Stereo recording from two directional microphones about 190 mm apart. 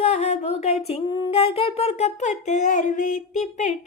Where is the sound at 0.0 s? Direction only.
35° left (ahead or behind).